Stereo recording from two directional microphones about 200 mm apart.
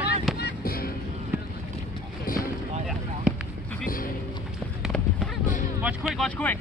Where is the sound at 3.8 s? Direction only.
45° left (ahead or behind).